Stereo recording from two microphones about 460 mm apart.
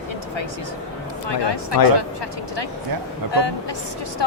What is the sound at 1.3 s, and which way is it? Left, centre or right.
Speech, left.